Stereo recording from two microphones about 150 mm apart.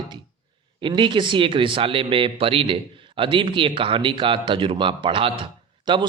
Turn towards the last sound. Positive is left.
turn(degrees=-30)  # may be behind; listen again after turning